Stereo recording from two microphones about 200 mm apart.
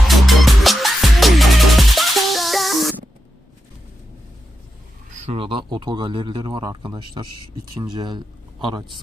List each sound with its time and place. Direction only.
0.1 s music: centre (ahead or behind)
5.1 s a man's voice: 30° right (ahead or behind)